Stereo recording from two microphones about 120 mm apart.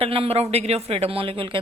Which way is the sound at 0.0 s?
55° right (ahead or behind).